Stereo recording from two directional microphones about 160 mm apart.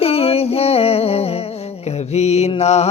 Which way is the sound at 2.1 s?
45° left (ahead or behind).